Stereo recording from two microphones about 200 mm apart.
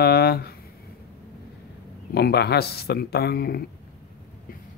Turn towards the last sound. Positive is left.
turn(degrees=50)  # may be behind; listen again after turning